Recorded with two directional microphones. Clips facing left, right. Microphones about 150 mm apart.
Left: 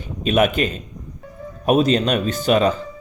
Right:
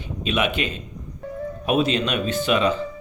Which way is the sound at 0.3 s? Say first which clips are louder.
Left 6 dB; 45° left (ahead or behind).